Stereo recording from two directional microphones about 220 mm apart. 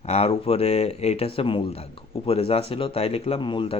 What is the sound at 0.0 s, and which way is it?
Speech, 30° left (ahead or behind).